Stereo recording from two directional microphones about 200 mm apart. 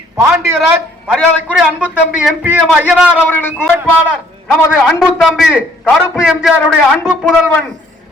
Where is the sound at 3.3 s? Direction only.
10° left (ahead or behind).